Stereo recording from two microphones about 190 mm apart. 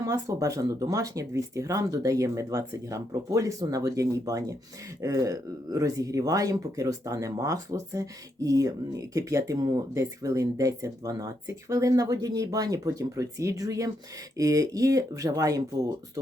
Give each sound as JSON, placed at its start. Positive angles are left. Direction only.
{"t": 0.0, "sound": "speech", "side_deg": -15}